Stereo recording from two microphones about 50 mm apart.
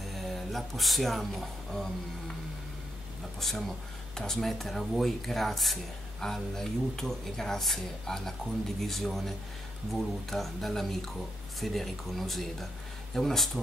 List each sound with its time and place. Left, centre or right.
0.1 s speech: centre
3.3 s speech: centre